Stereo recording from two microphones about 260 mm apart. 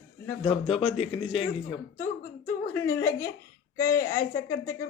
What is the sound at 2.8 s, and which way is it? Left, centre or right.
Speech, centre.